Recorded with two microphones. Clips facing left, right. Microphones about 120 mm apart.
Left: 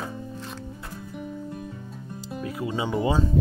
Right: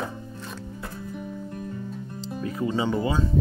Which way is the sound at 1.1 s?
5° left (ahead or behind).